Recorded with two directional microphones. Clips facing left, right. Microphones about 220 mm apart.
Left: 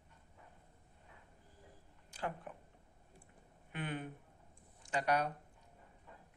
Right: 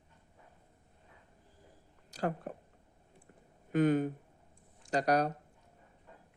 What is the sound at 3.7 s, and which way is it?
A woman's voice, 40° right (ahead or behind).